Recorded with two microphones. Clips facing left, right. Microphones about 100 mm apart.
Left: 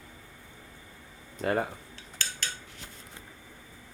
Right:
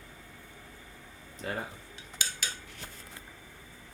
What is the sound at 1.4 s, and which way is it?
Speech, 60° left (ahead or behind).